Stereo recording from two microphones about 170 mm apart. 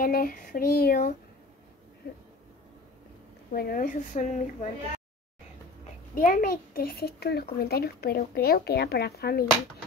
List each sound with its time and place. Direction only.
0.0 s a child's voice: 55° left (ahead or behind)
3.5 s speech: 60° left (ahead or behind)
6.1 s a child's voice: 55° left (ahead or behind)